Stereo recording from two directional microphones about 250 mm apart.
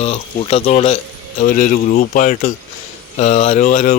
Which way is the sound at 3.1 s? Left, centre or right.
Left.